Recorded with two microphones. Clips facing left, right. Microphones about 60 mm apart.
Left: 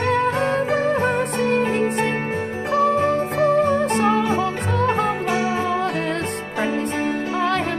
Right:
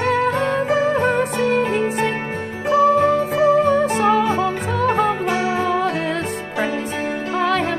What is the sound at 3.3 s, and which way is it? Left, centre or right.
Music, centre.